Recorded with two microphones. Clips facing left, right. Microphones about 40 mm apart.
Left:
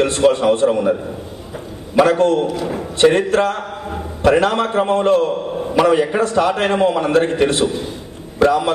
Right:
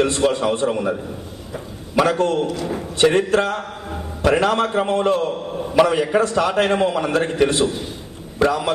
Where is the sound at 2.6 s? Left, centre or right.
Centre.